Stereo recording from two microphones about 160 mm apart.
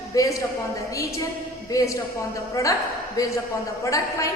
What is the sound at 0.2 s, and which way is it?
Speech, 20° left (ahead or behind).